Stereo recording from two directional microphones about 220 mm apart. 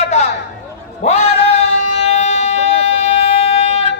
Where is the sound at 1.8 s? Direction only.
30° left (ahead or behind).